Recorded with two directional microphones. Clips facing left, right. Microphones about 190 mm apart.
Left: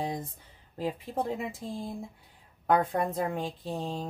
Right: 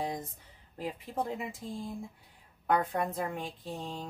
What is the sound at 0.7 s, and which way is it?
Speech, 30° left (ahead or behind).